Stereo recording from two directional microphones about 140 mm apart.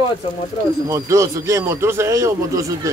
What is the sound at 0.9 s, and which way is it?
A man's voice, 20° right (ahead or behind).